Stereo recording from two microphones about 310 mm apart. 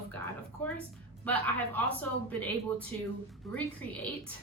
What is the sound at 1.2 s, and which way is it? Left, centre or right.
A woman's voice, centre.